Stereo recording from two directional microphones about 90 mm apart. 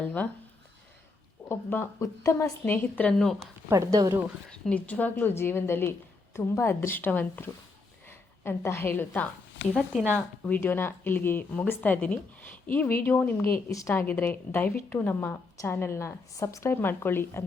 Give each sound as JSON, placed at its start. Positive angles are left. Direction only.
{"t": 0.0, "sound": "a woman's voice", "side_deg": 15}
{"t": 1.5, "sound": "speech", "side_deg": 25}
{"t": 2.0, "sound": "speech", "side_deg": 35}
{"t": 2.6, "sound": "a woman's voice", "side_deg": 20}
{"t": 3.7, "sound": "speech", "side_deg": -40}
{"t": 4.6, "sound": "a woman's voice", "side_deg": 15}
{"t": 10.6, "sound": "speech", "side_deg": 25}
{"t": 13.7, "sound": "speech", "side_deg": 40}
{"t": 13.9, "sound": "speech", "side_deg": 20}